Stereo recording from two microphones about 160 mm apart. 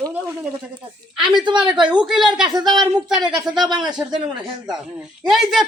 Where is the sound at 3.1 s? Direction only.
5° right (ahead or behind).